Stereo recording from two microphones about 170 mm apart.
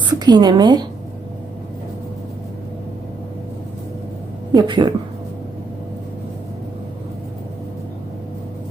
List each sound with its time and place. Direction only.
0.0 s a woman's voice: 25° right (ahead or behind)
4.5 s a woman's voice: 25° right (ahead or behind)